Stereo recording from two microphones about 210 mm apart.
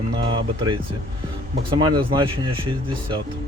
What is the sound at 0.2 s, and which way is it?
Speech, 25° right (ahead or behind).